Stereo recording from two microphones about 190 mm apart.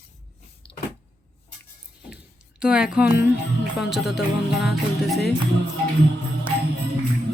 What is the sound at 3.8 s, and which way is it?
Speech, centre (ahead or behind).